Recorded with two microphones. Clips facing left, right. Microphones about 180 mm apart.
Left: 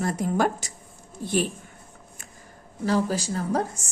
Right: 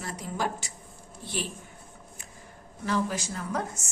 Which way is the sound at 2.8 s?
35° left (ahead or behind).